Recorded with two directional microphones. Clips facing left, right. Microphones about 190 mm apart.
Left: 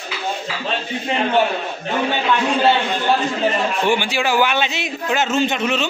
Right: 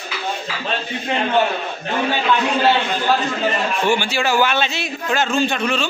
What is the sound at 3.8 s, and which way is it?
A man's voice, 15° left (ahead or behind).